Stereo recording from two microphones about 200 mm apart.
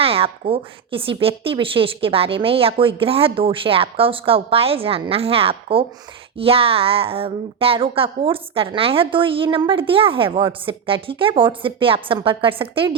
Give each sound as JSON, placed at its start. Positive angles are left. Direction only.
{"t": 0.0, "sound": "speech", "side_deg": -30}